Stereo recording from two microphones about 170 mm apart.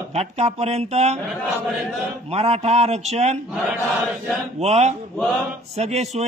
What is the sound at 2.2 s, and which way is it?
Speech, 40° right (ahead or behind).